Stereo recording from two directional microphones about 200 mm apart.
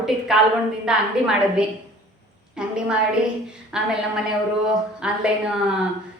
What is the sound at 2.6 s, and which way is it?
Speech, 5° right (ahead or behind).